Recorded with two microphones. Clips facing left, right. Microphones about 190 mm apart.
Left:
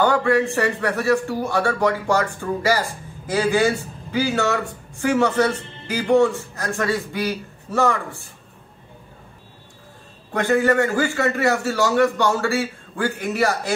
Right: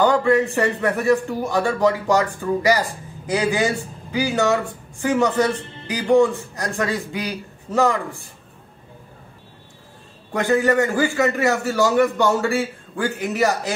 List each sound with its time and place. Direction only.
0.0 s a man's voice: 15° right (ahead or behind)
10.4 s a man's voice: 15° right (ahead or behind)